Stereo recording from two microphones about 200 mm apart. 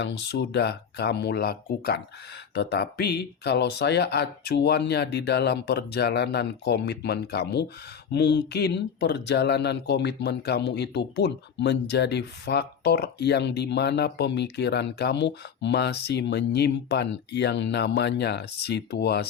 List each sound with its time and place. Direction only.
0.0 s speech: 60° left (ahead or behind)